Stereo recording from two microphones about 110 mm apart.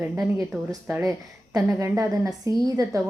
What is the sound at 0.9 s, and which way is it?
Speech, 25° right (ahead or behind).